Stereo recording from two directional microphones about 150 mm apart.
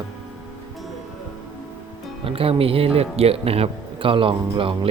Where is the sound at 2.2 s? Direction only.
40° right (ahead or behind).